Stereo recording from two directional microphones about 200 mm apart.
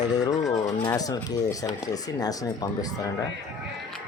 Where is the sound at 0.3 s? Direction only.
15° left (ahead or behind).